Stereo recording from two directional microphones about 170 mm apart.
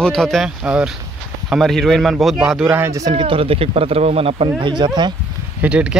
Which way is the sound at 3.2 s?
35° right (ahead or behind).